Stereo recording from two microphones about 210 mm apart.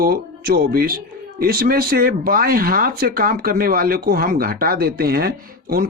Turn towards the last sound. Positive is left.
turn(degrees=-45)  # may be behind; listen again after turning